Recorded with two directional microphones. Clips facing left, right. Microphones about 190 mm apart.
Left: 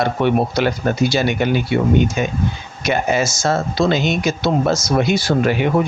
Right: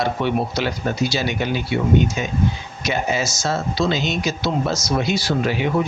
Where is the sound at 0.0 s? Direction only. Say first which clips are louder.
Left 4 dB; 55° left (ahead or behind).